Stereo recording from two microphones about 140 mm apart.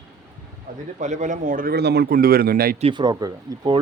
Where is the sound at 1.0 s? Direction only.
60° right (ahead or behind); by 2.8 s 90° right.